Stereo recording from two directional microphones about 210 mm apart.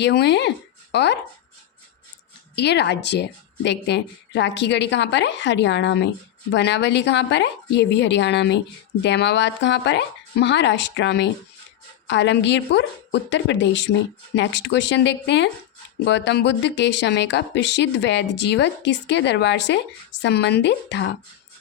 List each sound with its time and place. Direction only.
0.0 s speech: 55° left (ahead or behind)
2.6 s speech: 55° left (ahead or behind)